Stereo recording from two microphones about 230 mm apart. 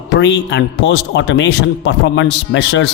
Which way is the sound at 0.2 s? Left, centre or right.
Left.